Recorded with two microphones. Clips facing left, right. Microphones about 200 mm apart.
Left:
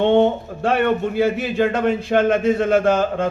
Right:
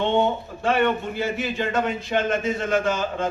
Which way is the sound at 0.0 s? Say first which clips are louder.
Left 6 dB; 60° left (ahead or behind).